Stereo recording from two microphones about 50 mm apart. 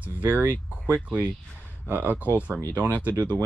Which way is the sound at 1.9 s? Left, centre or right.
Right.